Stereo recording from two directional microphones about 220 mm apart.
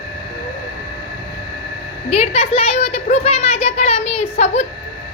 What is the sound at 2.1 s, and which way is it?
Speech, 25° left (ahead or behind).